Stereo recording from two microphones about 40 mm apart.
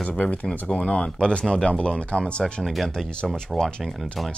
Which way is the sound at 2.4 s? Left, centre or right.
Centre.